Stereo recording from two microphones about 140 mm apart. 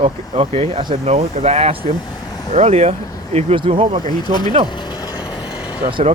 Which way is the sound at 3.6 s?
35° right (ahead or behind).